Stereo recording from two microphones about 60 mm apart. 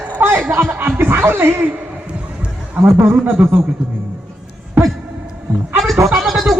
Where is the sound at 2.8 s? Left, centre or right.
Right.